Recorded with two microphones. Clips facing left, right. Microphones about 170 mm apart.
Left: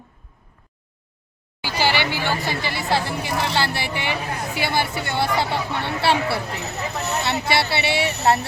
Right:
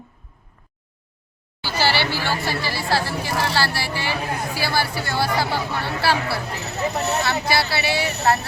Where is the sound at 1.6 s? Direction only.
15° left (ahead or behind).